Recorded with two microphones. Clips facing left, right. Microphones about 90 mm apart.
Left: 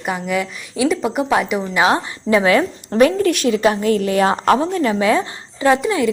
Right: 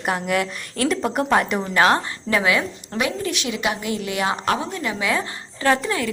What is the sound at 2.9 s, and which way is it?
A woman's voice, 35° left (ahead or behind).